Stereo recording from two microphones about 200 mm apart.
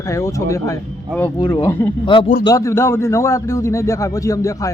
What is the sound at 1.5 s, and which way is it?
Speech, 15° left (ahead or behind).